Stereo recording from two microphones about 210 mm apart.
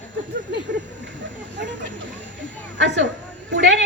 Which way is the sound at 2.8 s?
55° right (ahead or behind).